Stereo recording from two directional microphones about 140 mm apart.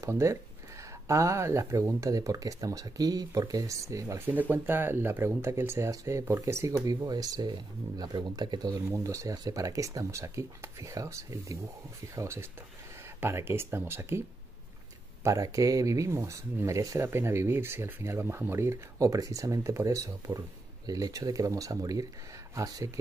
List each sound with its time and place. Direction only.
0.0 s speech: 20° right (ahead or behind)
15.2 s speech: 25° right (ahead or behind)